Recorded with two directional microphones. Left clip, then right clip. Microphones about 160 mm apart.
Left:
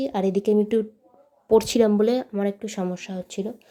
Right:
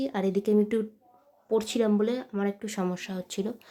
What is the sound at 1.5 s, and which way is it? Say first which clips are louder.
Speech: left 8 dB; 30° left (ahead or behind).